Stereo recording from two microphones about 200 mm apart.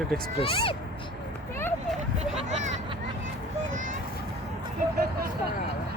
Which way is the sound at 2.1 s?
30° right (ahead or behind).